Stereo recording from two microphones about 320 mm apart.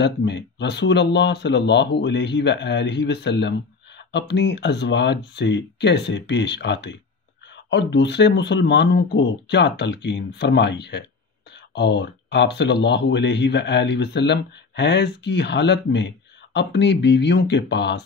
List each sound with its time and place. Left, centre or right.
0.0 s speech: left